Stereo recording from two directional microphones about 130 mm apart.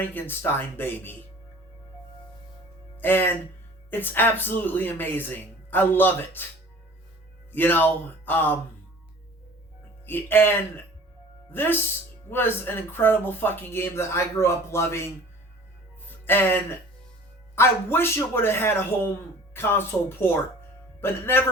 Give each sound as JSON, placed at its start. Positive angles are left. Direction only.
{"t": 0.1, "sound": "speech", "side_deg": 15}
{"t": 3.0, "sound": "speech", "side_deg": 15}
{"t": 7.5, "sound": "speech", "side_deg": 15}
{"t": 10.1, "sound": "speech", "side_deg": 15}
{"t": 11.5, "sound": "speech", "side_deg": 15}
{"t": 16.0, "sound": "music", "side_deg": 15}
{"t": 17.5, "sound": "a man's voice", "side_deg": 20}